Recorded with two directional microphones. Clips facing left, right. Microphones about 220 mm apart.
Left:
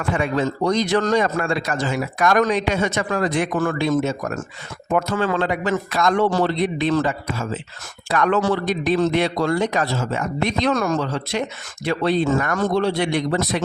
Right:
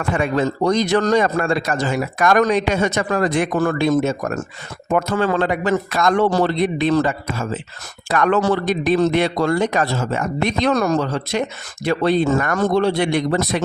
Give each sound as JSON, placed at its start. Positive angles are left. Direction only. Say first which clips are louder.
{"t": 0.1, "sound": "a man's voice", "louder": "right 2 dB", "side_deg": -45}
{"t": 5.4, "sound": "a man's voice", "louder": "right 3 dB", "side_deg": -55}
{"t": 10.8, "sound": "a man's voice", "louder": "right 3 dB", "side_deg": -35}